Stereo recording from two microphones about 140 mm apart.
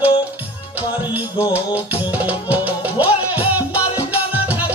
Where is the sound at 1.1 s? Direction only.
10° right (ahead or behind).